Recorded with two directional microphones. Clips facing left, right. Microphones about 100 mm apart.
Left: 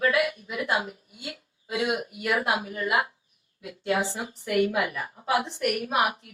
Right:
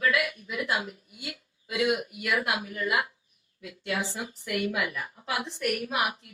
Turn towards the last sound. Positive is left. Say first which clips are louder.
# left 3 dB
turn(degrees=30)  # may be behind; listen again after turning